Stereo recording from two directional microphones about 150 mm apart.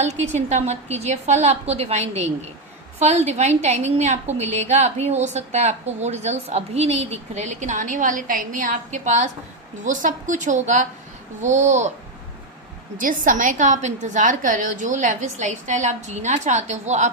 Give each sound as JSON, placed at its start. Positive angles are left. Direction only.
{"t": 0.0, "sound": "a woman's voice", "side_deg": -50}
{"t": 13.0, "sound": "a woman's voice", "side_deg": -65}